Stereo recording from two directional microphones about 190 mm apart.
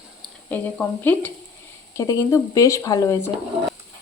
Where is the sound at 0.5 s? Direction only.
10° left (ahead or behind).